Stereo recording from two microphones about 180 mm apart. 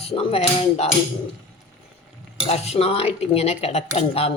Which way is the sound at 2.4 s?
35° left (ahead or behind).